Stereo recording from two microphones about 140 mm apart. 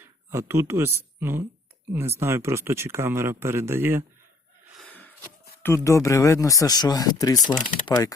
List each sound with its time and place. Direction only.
0.0 s speech: 20° right (ahead or behind)
4.8 s a sound: 10° left (ahead or behind)
5.6 s speech: 20° left (ahead or behind)
7.3 s speech: 65° left (ahead or behind)
7.9 s speech: 25° left (ahead or behind)